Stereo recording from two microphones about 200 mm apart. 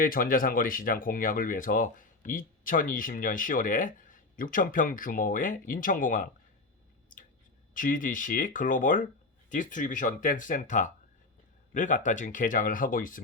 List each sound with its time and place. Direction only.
0.0 s speech: 45° left (ahead or behind)
7.7 s speech: 40° left (ahead or behind)